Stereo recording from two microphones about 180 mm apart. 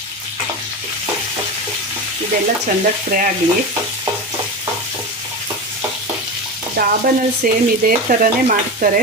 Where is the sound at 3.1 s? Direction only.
55° right (ahead or behind).